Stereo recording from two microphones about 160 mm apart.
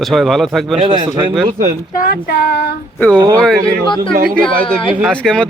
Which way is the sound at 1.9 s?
60° left (ahead or behind).